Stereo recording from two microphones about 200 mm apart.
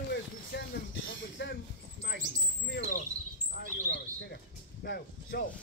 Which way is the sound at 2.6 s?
50° left (ahead or behind).